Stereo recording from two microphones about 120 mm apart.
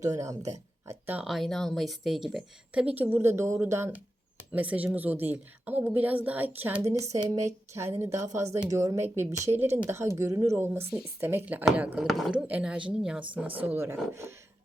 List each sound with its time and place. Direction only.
0.0 s speech: 25° right (ahead or behind)
0.9 s a sound: 15° right (ahead or behind)
1.2 s speech: centre (ahead or behind)
7.1 s speech: 30° right (ahead or behind)